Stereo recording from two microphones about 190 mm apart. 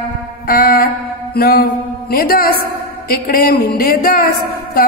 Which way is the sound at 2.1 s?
50° left (ahead or behind).